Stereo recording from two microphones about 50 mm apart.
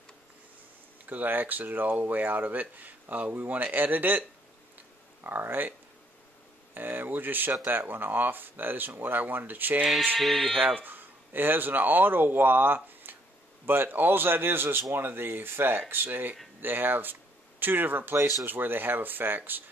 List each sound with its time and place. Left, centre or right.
1.0 s speech: right
5.2 s speech: right
10.1 s speech: centre
10.6 s speech: right